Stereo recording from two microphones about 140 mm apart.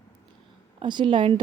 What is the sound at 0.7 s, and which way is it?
Speech, 35° right (ahead or behind).